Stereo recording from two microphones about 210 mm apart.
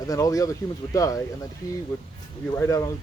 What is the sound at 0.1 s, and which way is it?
Speech, 15° left (ahead or behind).